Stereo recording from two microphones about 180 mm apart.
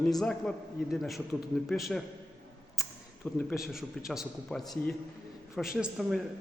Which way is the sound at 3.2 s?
5° left (ahead or behind).